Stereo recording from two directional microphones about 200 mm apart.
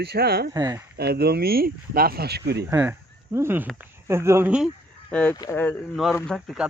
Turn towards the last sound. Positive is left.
turn(degrees=0)  # may be behind; listen again after turning